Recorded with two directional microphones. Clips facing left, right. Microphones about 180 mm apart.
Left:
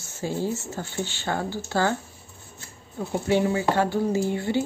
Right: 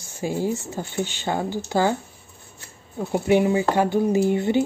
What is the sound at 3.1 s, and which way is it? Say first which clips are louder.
Speech: right 4 dB; 15° right (ahead or behind).